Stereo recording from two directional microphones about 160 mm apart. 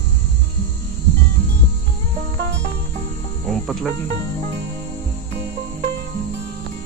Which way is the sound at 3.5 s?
Centre (ahead or behind).